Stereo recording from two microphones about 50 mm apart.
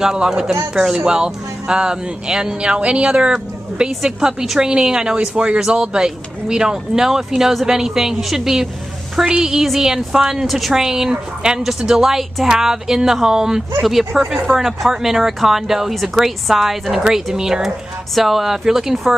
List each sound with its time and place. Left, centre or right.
0.0 s a woman's voice: centre